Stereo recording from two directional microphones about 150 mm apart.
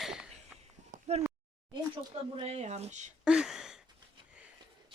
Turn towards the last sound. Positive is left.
turn(degrees=-5)  # may be behind; listen again after turning